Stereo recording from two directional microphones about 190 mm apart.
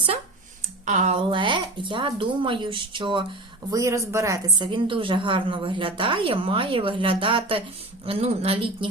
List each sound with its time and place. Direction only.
0.9 s a woman's voice: 35° right (ahead or behind)